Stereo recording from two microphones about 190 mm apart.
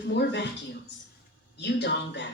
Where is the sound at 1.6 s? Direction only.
65° left (ahead or behind).